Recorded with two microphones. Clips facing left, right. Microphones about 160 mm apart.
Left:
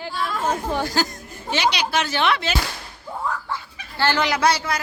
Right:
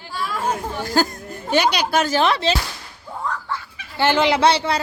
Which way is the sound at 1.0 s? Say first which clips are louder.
Right 4 dB; 45° right (ahead or behind).